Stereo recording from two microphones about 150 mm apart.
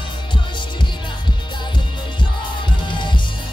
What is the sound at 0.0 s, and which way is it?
Music, 30° left (ahead or behind).